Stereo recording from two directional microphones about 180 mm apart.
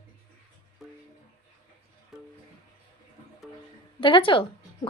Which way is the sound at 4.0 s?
30° left (ahead or behind).